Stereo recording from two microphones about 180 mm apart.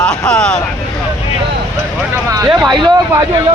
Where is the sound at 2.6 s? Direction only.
25° right (ahead or behind).